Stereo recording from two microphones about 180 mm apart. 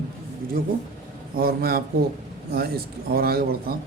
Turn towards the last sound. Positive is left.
turn(degrees=-60)  # may be behind; listen again after turning